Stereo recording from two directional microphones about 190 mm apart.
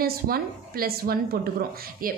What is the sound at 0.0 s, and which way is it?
A woman's voice, 50° right (ahead or behind).